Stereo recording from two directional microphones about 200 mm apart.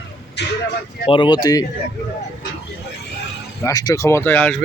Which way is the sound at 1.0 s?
25° left (ahead or behind).